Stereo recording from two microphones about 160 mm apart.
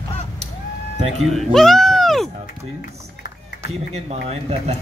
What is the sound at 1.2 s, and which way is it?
Speech, centre (ahead or behind).